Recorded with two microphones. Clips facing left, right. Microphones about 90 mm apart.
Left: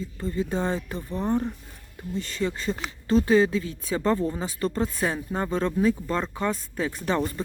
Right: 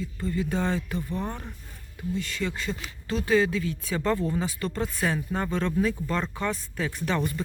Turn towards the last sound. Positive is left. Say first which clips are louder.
# left 2 dB
turn(degrees=30)  # may be behind; listen again after turning